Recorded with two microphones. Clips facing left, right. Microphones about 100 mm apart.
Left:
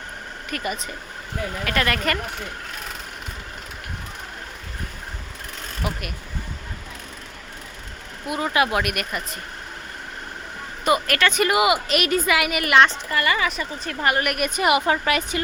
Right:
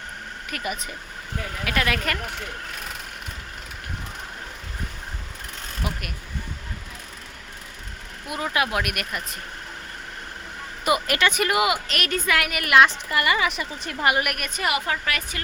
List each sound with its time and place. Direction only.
0.5 s a woman's voice: 5° right (ahead or behind)
5.8 s a woman's voice: centre (ahead or behind)
8.3 s a woman's voice: centre (ahead or behind)
10.8 s a woman's voice: 15° right (ahead or behind)
11.3 s a woman's voice: 5° left (ahead or behind)
13.1 s a woman's voice: 15° right (ahead or behind)
14.3 s a woman's voice: 10° left (ahead or behind)
14.6 s a woman's voice: 20° left (ahead or behind)